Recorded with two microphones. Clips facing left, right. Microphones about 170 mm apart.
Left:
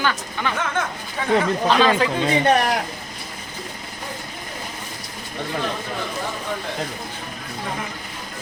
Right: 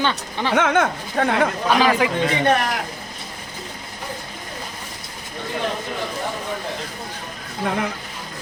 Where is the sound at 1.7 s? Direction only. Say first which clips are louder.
Even; 10° right (ahead or behind).